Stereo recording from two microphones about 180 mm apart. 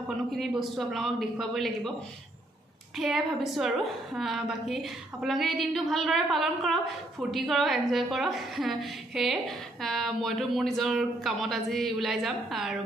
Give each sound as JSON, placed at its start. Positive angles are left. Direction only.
{"t": 0.3, "sound": "a woman's voice", "side_deg": 0}
{"t": 3.0, "sound": "a woman's voice", "side_deg": 0}